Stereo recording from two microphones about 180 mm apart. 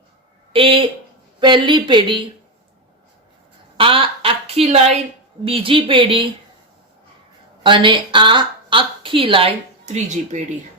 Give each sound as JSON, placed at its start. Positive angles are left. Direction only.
{"t": 0.5, "sound": "speech", "side_deg": -30}
{"t": 3.8, "sound": "a woman's voice", "side_deg": -30}
{"t": 7.6, "sound": "a woman's voice", "side_deg": -25}